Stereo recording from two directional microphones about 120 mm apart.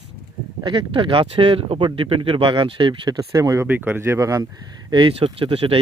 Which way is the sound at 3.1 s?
30° right (ahead or behind).